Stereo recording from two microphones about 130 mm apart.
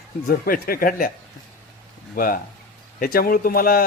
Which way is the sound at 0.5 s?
90° left.